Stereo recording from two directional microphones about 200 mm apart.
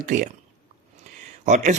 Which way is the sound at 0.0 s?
40° right (ahead or behind).